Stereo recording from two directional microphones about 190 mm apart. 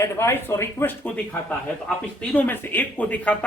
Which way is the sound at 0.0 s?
15° left (ahead or behind).